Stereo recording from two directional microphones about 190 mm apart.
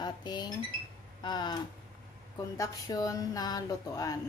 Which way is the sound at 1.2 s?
20° left (ahead or behind).